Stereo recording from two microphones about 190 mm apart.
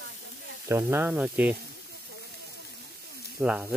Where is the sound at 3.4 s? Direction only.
5° right (ahead or behind).